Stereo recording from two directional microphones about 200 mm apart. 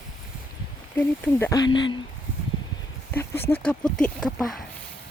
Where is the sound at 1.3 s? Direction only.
15° left (ahead or behind).